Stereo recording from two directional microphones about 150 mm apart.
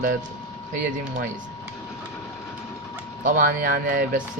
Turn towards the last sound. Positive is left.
turn(degrees=-70)  # may be behind; listen again after turning